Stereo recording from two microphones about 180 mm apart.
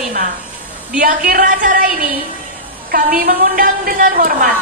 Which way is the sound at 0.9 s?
50° right (ahead or behind).